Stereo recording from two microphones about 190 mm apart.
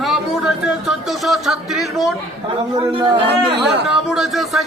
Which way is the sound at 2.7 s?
25° right (ahead or behind).